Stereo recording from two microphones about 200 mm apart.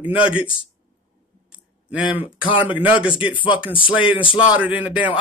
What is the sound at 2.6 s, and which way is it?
Speech, 10° right (ahead or behind).